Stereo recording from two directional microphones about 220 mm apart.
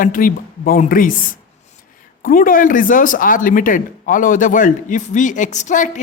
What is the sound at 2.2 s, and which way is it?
Speech, 40° left (ahead or behind).